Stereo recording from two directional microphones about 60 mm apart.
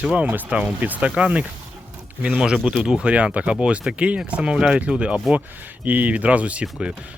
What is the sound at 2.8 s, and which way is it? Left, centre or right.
Speech, centre.